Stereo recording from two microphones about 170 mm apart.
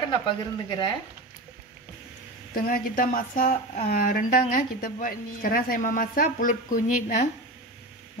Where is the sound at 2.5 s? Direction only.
55° left (ahead or behind).